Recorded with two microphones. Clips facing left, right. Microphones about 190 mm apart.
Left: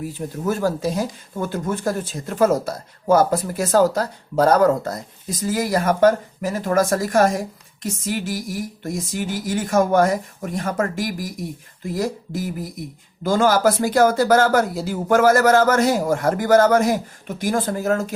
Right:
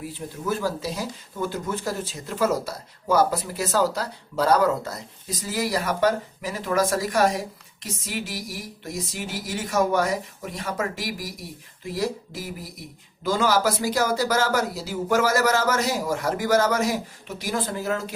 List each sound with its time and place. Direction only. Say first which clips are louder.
0.0 s speech: left 6 dB; 45° left (ahead or behind)